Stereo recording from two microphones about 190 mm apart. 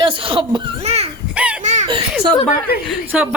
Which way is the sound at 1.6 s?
40° right (ahead or behind).